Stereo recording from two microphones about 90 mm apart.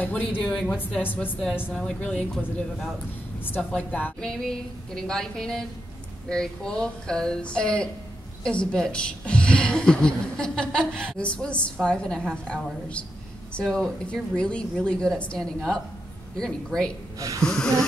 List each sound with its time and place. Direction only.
0.0 s a woman's voice: 15° left (ahead or behind)
1.7 s a woman's voice: 10° left (ahead or behind)
3.7 s a woman's voice: 15° left (ahead or behind)